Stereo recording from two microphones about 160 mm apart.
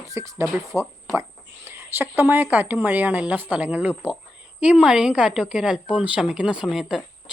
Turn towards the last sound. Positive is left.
turn(degrees=-5)  # may be behind; listen again after turning